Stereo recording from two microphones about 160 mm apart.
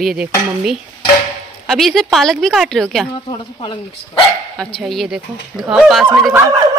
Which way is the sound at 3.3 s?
30° left (ahead or behind).